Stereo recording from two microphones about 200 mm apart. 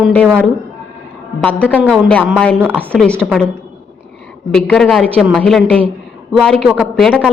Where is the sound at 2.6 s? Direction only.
10° right (ahead or behind).